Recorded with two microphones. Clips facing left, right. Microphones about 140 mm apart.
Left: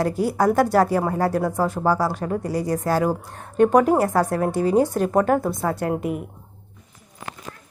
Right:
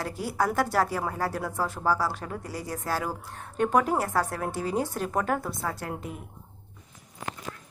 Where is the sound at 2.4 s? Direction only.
80° left.